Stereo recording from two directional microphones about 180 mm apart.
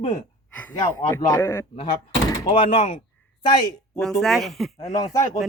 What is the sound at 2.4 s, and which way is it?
Speech, 35° left (ahead or behind).